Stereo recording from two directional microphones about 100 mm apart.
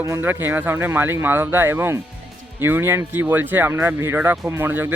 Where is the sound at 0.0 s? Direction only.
25° right (ahead or behind).